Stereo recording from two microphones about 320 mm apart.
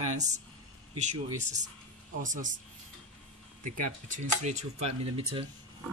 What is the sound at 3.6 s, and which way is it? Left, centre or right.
Speech, right.